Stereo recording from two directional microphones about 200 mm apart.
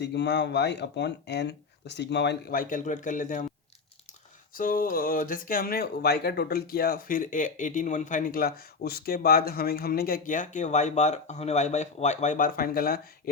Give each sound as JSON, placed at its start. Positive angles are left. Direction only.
{"t": 0.0, "sound": "speech", "side_deg": 60}
{"t": 4.5, "sound": "speech", "side_deg": 45}